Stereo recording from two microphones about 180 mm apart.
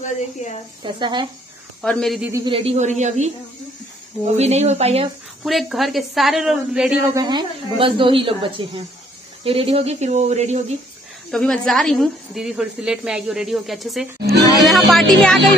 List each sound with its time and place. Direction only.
0.8 s speech: 25° right (ahead or behind)
1.8 s a woman's voice: 5° left (ahead or behind)
2.3 s speech: 25° right (ahead or behind)
4.4 s speech: 35° right (ahead or behind)
5.4 s a woman's voice: centre (ahead or behind)
7.2 s speech: 25° right (ahead or behind)
11.2 s a woman's voice: 5° left (ahead or behind)
14.6 s music: centre (ahead or behind)